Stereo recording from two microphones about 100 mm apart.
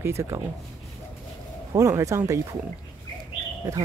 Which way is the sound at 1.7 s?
30° right (ahead or behind).